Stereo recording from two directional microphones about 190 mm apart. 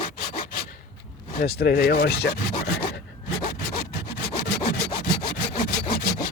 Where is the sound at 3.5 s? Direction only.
55° left (ahead or behind).